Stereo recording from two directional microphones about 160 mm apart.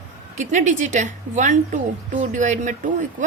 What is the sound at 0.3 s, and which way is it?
A woman's voice, 50° right (ahead or behind).